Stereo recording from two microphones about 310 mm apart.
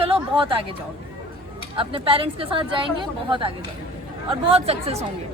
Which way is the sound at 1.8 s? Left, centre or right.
Centre.